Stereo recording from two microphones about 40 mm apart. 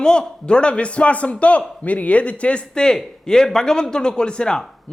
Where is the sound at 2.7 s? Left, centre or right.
Centre.